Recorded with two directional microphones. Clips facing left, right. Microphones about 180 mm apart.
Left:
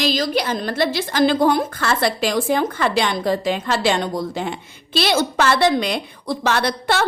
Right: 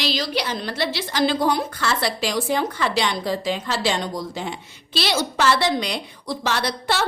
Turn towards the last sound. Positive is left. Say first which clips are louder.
# left 4 dB
turn(degrees=55)  # may be behind; listen again after turning